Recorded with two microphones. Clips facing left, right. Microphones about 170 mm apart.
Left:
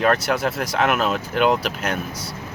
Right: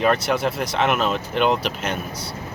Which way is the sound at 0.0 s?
Centre (ahead or behind).